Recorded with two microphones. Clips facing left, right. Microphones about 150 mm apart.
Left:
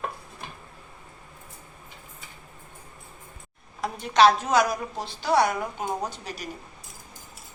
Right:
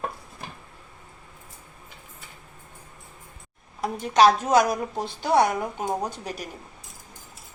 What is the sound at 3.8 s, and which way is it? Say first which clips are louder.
A woman's voice: right 1 dB; 45° right (ahead or behind).